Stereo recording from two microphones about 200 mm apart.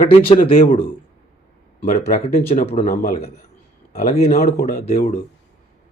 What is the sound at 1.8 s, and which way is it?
A man's voice, 35° left (ahead or behind).